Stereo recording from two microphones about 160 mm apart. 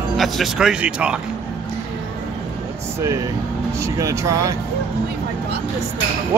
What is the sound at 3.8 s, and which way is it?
Speech, 20° right (ahead or behind).